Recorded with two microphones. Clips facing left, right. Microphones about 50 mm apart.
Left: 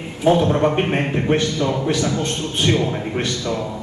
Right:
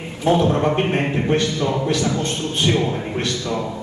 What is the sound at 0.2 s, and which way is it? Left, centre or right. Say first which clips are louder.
A man's voice: left 1 dB; centre.